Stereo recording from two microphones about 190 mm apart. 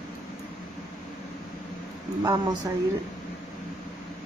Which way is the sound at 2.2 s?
20° right (ahead or behind).